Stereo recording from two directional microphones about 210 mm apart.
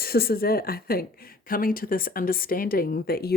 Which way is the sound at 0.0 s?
45° left (ahead or behind).